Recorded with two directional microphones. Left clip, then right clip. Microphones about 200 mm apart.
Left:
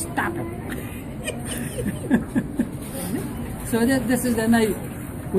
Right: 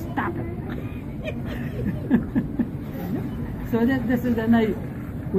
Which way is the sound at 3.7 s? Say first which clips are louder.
Left 2 dB; 20° left (ahead or behind).